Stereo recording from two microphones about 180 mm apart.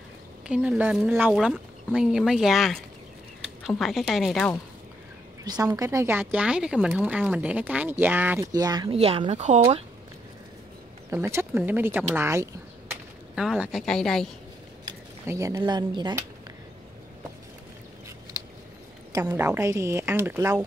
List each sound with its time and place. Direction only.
0.5 s speech: 5° right (ahead or behind)
5.4 s speech: 20° right (ahead or behind)
8.5 s speech: 20° right (ahead or behind)
8.9 s speech: 35° right (ahead or behind)
11.1 s speech: 15° right (ahead or behind)
13.3 s speech: 5° right (ahead or behind)
14.9 s speech: 20° right (ahead or behind)
19.1 s speech: 15° right (ahead or behind)